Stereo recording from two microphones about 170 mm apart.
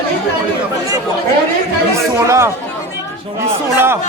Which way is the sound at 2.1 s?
15° right (ahead or behind).